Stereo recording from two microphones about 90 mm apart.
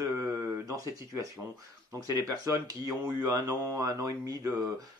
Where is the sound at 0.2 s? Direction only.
35° right (ahead or behind).